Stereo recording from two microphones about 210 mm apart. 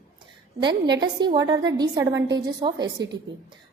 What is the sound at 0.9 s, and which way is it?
A woman's voice, 20° right (ahead or behind).